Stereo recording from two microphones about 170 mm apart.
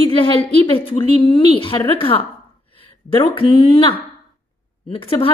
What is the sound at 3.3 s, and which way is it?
Speech, 30° left (ahead or behind).